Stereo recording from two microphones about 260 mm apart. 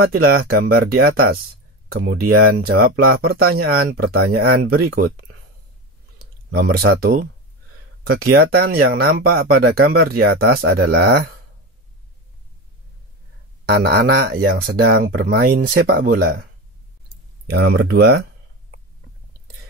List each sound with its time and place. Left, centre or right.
0.0 s speech: right
6.5 s speech: right
8.4 s speech: right
13.7 s speech: right
17.5 s speech: right